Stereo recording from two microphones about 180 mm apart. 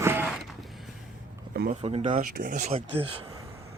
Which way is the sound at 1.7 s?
35° right (ahead or behind).